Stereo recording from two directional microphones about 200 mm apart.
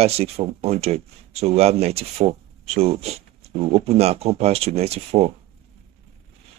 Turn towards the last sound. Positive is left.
turn(degrees=-30)  # may be behind; listen again after turning